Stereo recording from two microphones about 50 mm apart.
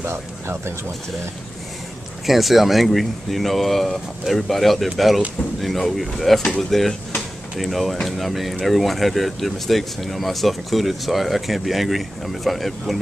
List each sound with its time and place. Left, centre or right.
0.0 s speech: right
2.2 s speech: centre